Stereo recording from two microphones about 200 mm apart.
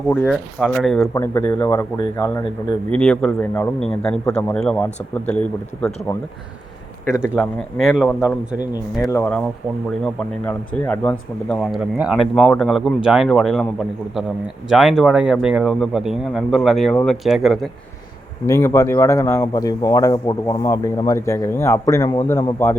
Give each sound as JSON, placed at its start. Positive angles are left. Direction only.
{"t": 0.1, "sound": "speech", "side_deg": 5}
{"t": 1.1, "sound": "speech", "side_deg": 10}
{"t": 2.9, "sound": "speech", "side_deg": 5}
{"t": 7.9, "sound": "speech", "side_deg": -5}
{"t": 9.0, "sound": "speech", "side_deg": 10}
{"t": 10.4, "sound": "speech", "side_deg": 5}
{"t": 18.4, "sound": "speech", "side_deg": 15}